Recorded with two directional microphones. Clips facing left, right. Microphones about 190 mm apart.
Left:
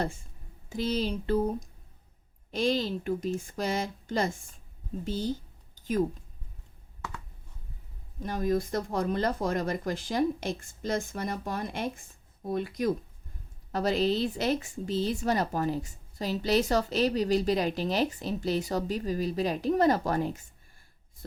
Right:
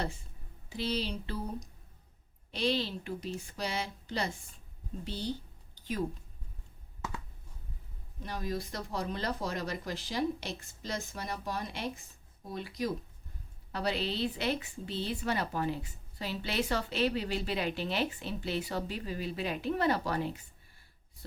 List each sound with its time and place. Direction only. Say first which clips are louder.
0.7 s speech: left 5 dB; 45° left (ahead or behind)
2.5 s speech: left 4 dB; 45° left (ahead or behind)
5.0 s a sound: left 5 dB; 45° left (ahead or behind)
8.2 s speech: left 8 dB; 50° left (ahead or behind)